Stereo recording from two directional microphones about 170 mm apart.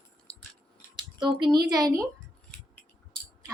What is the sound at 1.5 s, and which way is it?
Speech, 20° right (ahead or behind).